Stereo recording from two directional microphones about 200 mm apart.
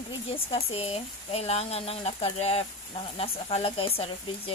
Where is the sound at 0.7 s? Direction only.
30° left (ahead or behind).